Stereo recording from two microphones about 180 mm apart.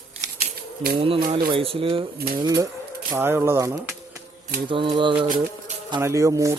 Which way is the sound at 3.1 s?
15° right (ahead or behind).